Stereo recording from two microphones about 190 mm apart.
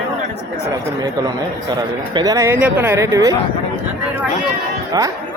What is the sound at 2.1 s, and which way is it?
Speech, 20° right (ahead or behind).